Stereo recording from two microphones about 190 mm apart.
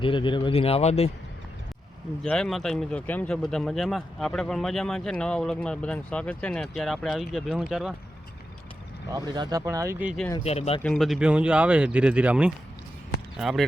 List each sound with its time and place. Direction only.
0.0 s speech: 25° left (ahead or behind)
2.2 s speech: 5° left (ahead or behind)
9.0 s speech: 20° right (ahead or behind)
10.4 s speech: 35° left (ahead or behind)
10.8 s speech: centre (ahead or behind)